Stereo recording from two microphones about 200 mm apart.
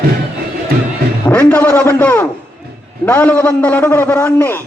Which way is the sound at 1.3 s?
10° left (ahead or behind).